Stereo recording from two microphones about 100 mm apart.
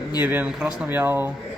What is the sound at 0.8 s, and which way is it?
Speech, 20° right (ahead or behind).